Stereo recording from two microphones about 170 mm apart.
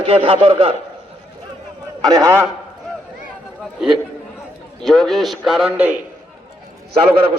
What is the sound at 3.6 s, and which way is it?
Chatter, 5° right (ahead or behind).